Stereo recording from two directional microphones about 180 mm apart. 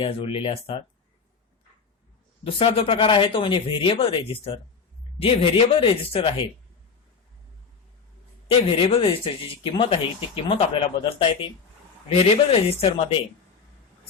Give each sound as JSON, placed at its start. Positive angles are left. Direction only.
{"t": 0.0, "sound": "speech", "side_deg": 30}
{"t": 2.4, "sound": "speech", "side_deg": 30}
{"t": 8.4, "sound": "speech", "side_deg": 30}